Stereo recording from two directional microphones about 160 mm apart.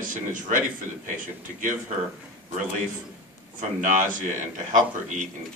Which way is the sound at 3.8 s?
55° right (ahead or behind).